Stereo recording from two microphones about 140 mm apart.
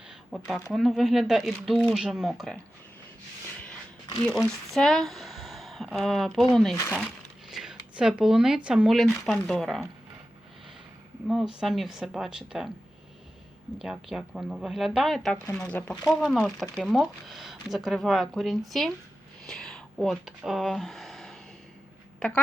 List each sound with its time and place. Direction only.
0.3 s speech: centre (ahead or behind)
4.4 s speech: centre (ahead or behind)
6.7 s speech: 15° left (ahead or behind)
7.5 s speech: 5° right (ahead or behind)
11.3 s speech: centre (ahead or behind)
13.7 s speech: 5° right (ahead or behind)